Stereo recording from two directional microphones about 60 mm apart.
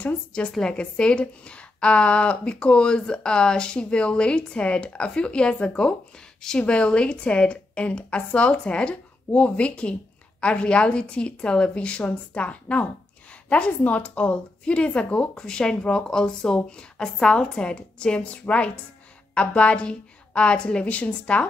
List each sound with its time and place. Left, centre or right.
0.3 s a woman's voice: centre